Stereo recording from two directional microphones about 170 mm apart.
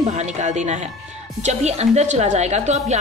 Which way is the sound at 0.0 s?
40° right (ahead or behind).